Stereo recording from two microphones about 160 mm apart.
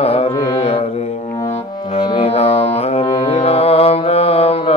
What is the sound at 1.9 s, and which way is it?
Music, 35° left (ahead or behind).